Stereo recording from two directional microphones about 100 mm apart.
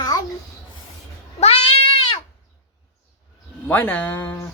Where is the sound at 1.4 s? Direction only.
80° left.